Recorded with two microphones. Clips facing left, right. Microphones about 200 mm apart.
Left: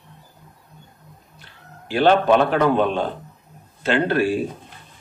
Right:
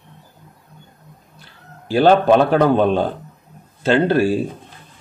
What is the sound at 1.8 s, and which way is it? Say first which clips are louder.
A man's voice: right 3 dB; 40° right (ahead or behind).